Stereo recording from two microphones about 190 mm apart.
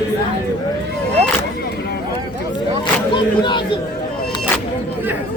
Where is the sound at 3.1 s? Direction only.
25° left (ahead or behind).